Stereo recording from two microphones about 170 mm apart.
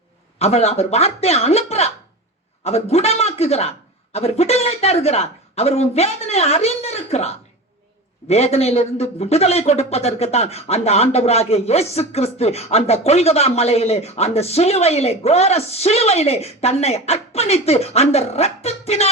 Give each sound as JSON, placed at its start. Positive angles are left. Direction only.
{"t": 0.3, "sound": "speech", "side_deg": 35}